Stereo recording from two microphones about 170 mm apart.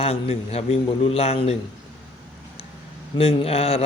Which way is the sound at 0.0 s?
35° left (ahead or behind).